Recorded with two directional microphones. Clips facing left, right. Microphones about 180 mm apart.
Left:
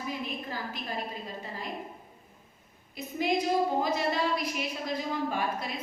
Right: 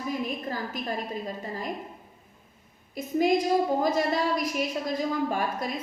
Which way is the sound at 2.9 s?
45° right (ahead or behind).